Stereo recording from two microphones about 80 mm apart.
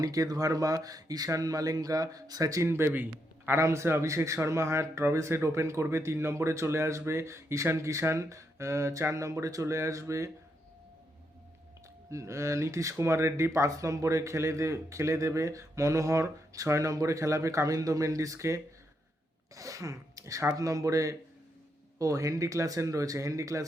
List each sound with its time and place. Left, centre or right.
0.0 s speech: right
2.6 s a man's voice: right
3.6 s speech: right
12.1 s speech: right